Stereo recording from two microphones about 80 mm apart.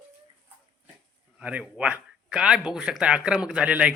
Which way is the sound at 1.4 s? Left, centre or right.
Centre.